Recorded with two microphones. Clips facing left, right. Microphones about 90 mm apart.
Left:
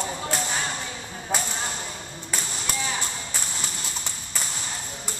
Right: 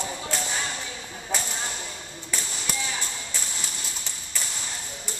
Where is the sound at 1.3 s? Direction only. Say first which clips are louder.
Left 3 dB; 45° left (ahead or behind).